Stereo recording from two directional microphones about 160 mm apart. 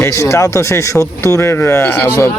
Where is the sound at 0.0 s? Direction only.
20° left (ahead or behind).